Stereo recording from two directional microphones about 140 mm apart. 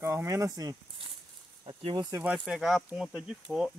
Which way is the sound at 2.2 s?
5° right (ahead or behind).